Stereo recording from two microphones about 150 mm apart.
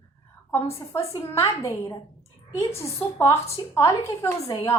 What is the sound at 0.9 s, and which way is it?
A woman's voice, 20° left (ahead or behind).